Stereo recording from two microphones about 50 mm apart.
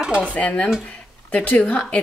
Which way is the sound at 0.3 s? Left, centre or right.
Left.